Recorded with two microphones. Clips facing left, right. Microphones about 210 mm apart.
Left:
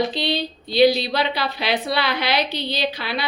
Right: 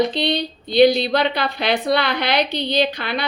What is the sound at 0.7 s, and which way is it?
Speech, 55° right (ahead or behind).